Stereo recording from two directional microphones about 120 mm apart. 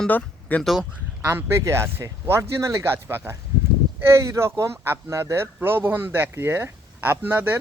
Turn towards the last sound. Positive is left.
turn(degrees=-15)  # may be behind; listen again after turning